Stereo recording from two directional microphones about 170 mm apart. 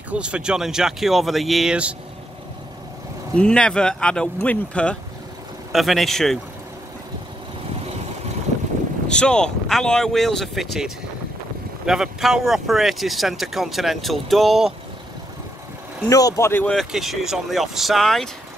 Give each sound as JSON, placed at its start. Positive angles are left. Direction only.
{"t": 0.1, "sound": "speech", "side_deg": -5}
{"t": 3.3, "sound": "speech", "side_deg": 5}
{"t": 9.1, "sound": "speech", "side_deg": 5}
{"t": 16.1, "sound": "speech", "side_deg": 20}
{"t": 16.7, "sound": "speech", "side_deg": 0}